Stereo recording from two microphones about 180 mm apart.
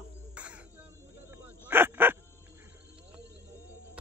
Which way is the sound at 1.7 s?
10° right (ahead or behind).